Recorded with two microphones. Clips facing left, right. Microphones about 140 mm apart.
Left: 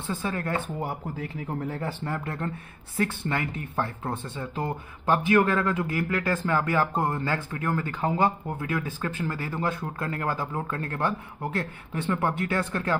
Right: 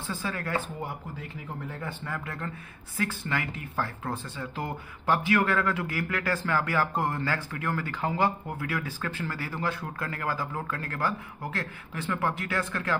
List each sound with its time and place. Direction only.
0.0 s speech: 25° left (ahead or behind)
1.7 s speech: 35° left (ahead or behind)